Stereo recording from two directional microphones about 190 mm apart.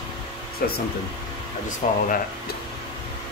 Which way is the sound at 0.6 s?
50° left (ahead or behind).